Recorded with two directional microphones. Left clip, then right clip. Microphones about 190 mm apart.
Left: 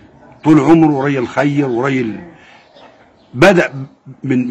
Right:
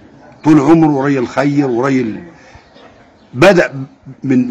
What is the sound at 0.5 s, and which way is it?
A man's voice, 10° left (ahead or behind).